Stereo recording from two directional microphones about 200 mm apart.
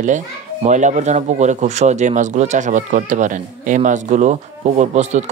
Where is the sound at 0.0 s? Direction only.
35° right (ahead or behind).